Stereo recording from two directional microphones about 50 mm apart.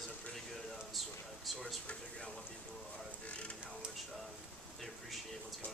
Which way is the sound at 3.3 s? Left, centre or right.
Left.